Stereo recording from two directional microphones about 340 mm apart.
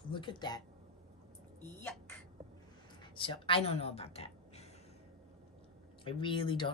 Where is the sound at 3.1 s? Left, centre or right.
Centre.